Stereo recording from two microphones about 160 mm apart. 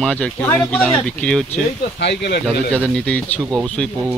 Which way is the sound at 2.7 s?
5° left (ahead or behind).